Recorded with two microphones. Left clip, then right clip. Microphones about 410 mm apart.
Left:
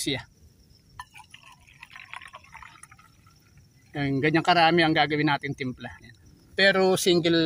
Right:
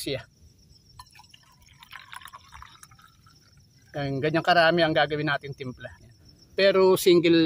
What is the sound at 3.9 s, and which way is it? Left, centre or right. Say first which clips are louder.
Speech: left 2 dB; right.